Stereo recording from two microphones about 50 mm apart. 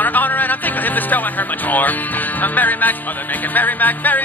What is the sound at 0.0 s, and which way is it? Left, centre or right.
Music, left.